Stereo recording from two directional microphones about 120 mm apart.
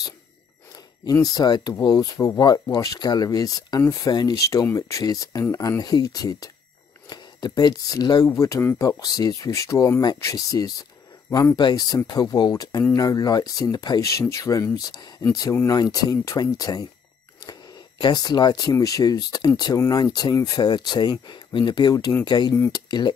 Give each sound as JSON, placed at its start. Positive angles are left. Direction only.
{"t": 1.1, "sound": "speech", "side_deg": 30}